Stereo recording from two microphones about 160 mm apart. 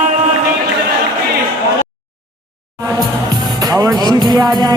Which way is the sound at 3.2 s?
25° right (ahead or behind).